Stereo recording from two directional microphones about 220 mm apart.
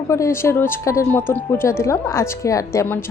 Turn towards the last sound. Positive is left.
turn(degrees=10)  # may be behind; listen again after turning